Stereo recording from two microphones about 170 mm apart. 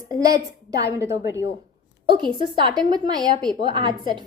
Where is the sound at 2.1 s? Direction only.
30° right (ahead or behind).